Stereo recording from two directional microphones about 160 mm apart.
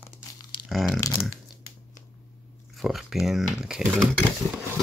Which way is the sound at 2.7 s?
Centre (ahead or behind).